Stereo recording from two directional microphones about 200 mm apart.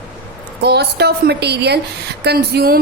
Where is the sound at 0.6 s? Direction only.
55° right (ahead or behind).